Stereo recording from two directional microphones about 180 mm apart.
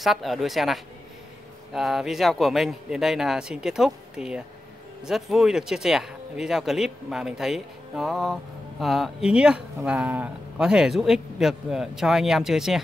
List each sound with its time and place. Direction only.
0.0 s speech: centre (ahead or behind)